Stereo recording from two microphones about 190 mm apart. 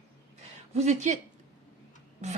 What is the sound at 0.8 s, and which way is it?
Speech, 40° right (ahead or behind).